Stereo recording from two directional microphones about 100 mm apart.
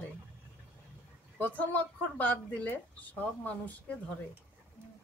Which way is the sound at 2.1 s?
15° left (ahead or behind).